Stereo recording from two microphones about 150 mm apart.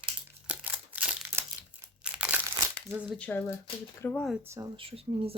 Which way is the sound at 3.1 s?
10° left (ahead or behind).